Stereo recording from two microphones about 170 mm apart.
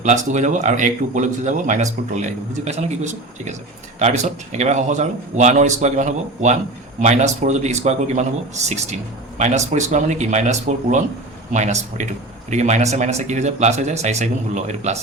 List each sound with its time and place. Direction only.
0.0 s speech: 45° right (ahead or behind)